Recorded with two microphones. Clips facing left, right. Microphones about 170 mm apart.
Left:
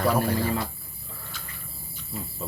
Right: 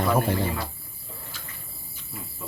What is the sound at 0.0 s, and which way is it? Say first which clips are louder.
Speech: even; 25° right (ahead or behind).